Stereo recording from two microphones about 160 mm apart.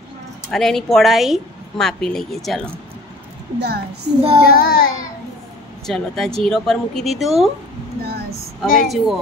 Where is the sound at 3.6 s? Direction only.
90° right.